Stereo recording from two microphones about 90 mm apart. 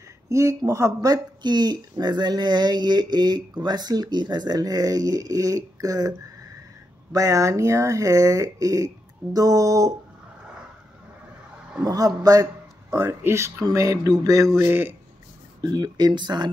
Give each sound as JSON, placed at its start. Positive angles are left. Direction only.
{"t": 0.3, "sound": "speech", "side_deg": -35}
{"t": 11.8, "sound": "speech", "side_deg": -40}
{"t": 12.9, "sound": "speech", "side_deg": -25}
{"t": 13.7, "sound": "speech", "side_deg": -40}
{"t": 14.6, "sound": "speech", "side_deg": -25}
{"t": 15.6, "sound": "speech", "side_deg": -50}